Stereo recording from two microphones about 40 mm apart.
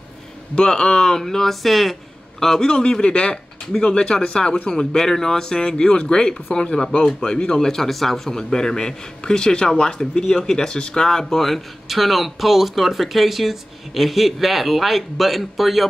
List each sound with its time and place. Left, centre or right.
0.6 s speech: centre